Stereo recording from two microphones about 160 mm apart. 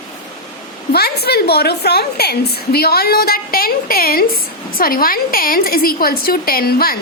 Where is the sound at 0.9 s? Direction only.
80° left.